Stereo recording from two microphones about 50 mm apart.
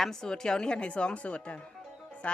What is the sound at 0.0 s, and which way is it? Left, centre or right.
Speech, centre.